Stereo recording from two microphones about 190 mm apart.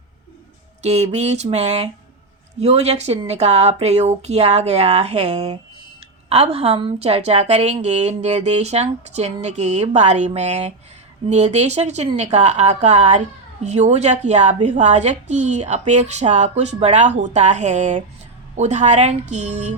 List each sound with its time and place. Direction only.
0.8 s a woman's voice: 35° right (ahead or behind)